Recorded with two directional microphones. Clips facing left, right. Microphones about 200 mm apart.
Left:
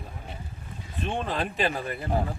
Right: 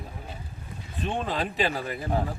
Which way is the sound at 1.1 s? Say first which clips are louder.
Even; centre (ahead or behind).